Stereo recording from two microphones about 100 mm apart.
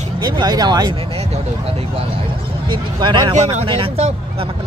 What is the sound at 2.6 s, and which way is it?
Speech, 55° right (ahead or behind).